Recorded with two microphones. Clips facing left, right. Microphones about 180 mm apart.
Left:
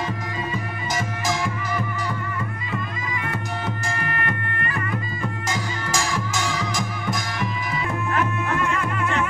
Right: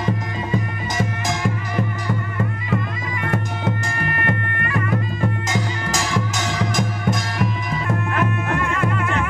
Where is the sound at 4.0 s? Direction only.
55° right (ahead or behind).